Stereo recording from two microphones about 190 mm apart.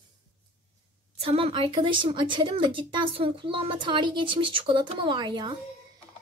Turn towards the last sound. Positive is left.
turn(degrees=-25)  # may be behind; listen again after turning